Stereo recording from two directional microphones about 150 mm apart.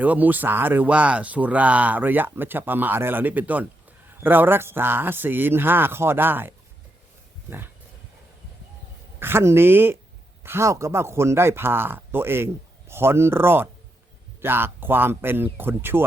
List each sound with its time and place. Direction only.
0.0 s speech: 10° right (ahead or behind)
9.1 s speech: 15° right (ahead or behind)